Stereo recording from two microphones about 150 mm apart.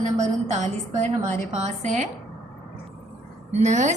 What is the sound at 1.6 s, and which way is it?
Speech, 55° right (ahead or behind).